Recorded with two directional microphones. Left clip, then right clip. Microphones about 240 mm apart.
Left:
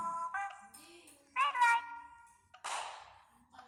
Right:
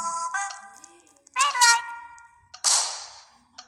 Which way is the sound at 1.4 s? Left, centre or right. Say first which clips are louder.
Right 10 dB; right.